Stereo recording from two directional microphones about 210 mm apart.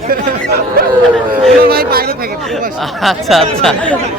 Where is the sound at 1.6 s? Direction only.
45° right (ahead or behind).